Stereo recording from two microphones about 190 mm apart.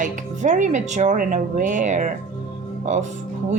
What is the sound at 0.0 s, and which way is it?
Speech, 40° right (ahead or behind).